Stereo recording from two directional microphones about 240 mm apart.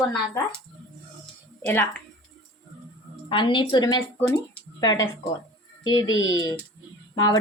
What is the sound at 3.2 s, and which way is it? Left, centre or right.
A woman's voice, left.